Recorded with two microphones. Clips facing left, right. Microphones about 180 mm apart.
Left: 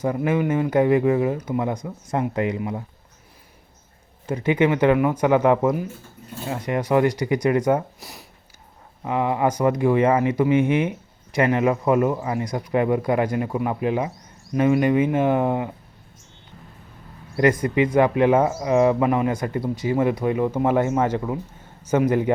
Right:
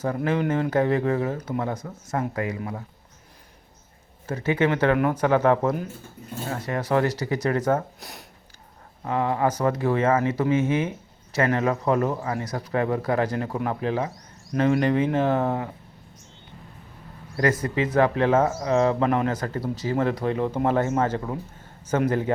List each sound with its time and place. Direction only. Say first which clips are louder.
0.0 s speech: left 3 dB; 10° left (ahead or behind)
4.3 s speech: left 3 dB; 15° left (ahead or behind)
9.0 s speech: left 2 dB; 15° left (ahead or behind)
17.9 s speech: left 2 dB; 15° left (ahead or behind)